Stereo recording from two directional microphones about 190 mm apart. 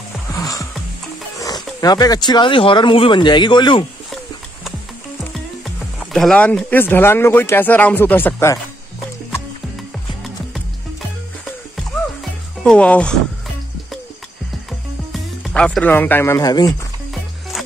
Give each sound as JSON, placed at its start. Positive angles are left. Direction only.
{"t": 0.3, "sound": "music", "side_deg": 20}
{"t": 1.4, "sound": "speech", "side_deg": 20}
{"t": 5.9, "sound": "speech", "side_deg": 0}
{"t": 12.6, "sound": "speech", "side_deg": 5}
{"t": 15.4, "sound": "speech", "side_deg": 5}